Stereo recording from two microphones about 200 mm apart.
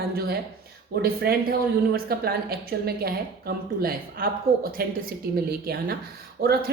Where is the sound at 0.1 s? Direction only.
50° right (ahead or behind).